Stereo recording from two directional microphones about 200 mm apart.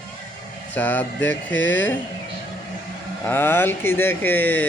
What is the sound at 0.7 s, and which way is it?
Speech, 10° left (ahead or behind).